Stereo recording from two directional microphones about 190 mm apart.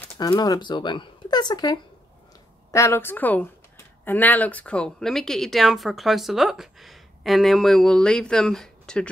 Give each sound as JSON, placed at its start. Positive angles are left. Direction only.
{"t": 0.2, "sound": "speech", "side_deg": 20}